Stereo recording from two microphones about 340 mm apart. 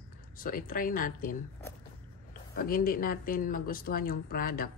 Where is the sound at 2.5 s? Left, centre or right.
Left.